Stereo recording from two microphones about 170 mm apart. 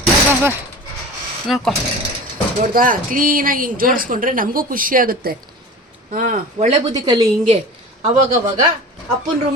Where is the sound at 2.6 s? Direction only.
55° right (ahead or behind).